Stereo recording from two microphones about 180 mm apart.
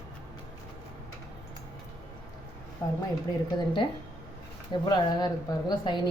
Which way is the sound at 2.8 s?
15° left (ahead or behind).